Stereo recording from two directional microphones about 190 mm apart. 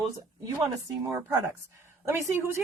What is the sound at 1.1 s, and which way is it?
A woman's voice, 15° right (ahead or behind).